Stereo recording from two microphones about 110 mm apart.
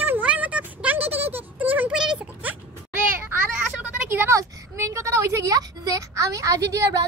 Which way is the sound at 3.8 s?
20° right (ahead or behind).